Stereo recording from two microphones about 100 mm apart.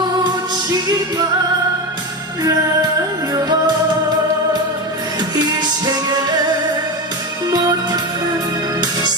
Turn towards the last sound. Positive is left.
turn(degrees=-45)  # may be behind; listen again after turning